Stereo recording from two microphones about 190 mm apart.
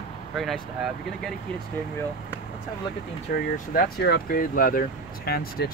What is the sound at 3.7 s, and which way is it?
Speech, 55° left (ahead or behind).